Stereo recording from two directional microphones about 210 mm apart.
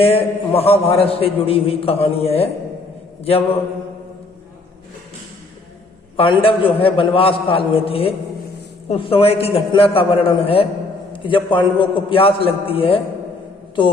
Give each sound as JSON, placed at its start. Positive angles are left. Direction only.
{"t": 0.0, "sound": "a man's voice", "side_deg": 30}
{"t": 6.1, "sound": "a man's voice", "side_deg": 25}